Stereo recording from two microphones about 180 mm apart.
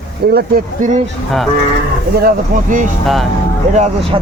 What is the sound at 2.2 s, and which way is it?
Speech, 45° right (ahead or behind).